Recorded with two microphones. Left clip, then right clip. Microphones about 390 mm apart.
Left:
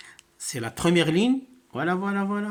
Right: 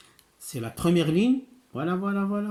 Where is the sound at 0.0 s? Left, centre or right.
Centre.